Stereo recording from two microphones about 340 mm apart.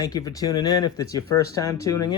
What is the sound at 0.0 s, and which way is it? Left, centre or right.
Speech, centre.